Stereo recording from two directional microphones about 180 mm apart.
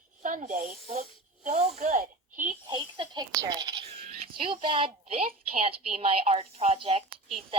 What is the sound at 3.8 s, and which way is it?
A child's voice, 35° right (ahead or behind).